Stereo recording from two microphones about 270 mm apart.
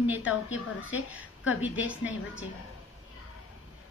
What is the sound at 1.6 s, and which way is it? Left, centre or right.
Speech, centre.